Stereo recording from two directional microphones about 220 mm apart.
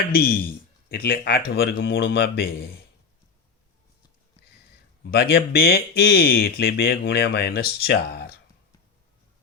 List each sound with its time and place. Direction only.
0.1 s speech: 45° left (ahead or behind)
5.1 s speech: 45° left (ahead or behind)